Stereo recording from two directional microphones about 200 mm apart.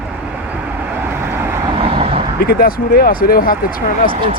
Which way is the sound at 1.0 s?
10° right (ahead or behind).